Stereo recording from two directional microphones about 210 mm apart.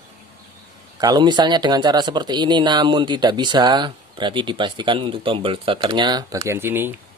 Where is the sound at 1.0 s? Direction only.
20° right (ahead or behind).